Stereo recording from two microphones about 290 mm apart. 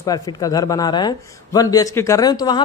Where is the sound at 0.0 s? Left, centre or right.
Centre.